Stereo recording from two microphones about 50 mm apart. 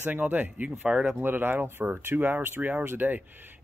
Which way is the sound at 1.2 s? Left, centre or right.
Right.